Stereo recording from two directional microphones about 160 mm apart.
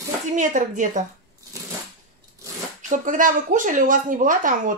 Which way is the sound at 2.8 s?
55° right (ahead or behind).